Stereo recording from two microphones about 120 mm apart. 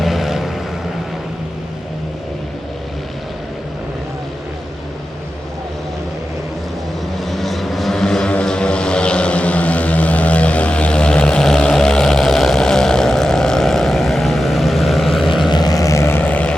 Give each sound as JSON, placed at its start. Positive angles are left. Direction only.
{"t": 0.0, "sound": "vehicle", "side_deg": 0}
{"t": 7.2, "sound": "vehicle", "side_deg": 0}
{"t": 15.4, "sound": "vehicle", "side_deg": 35}